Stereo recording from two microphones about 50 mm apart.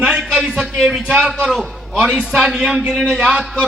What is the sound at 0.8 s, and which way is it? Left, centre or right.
A man's voice, centre.